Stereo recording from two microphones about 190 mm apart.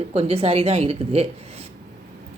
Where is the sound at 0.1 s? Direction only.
30° right (ahead or behind).